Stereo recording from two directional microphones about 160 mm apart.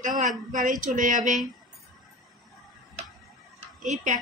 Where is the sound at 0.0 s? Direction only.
50° right (ahead or behind).